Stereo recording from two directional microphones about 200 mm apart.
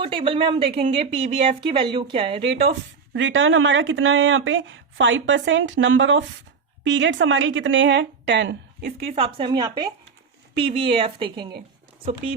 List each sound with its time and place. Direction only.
0.0 s a woman's voice: 25° right (ahead or behind)
2.6 s a woman's voice: 55° right (ahead or behind)
9.0 s a woman's voice: 30° right (ahead or behind)